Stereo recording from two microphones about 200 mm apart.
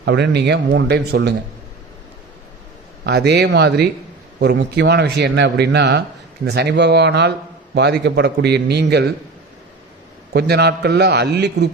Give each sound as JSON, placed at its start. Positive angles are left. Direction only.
{"t": 0.0, "sound": "speech", "side_deg": -60}
{"t": 3.0, "sound": "speech", "side_deg": -55}
{"t": 10.3, "sound": "speech", "side_deg": -55}